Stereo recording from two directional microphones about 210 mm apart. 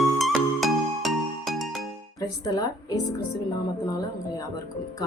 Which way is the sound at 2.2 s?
15° left (ahead or behind).